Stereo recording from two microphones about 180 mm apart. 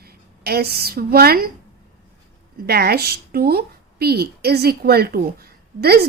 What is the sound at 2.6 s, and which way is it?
A woman's voice, 60° right (ahead or behind).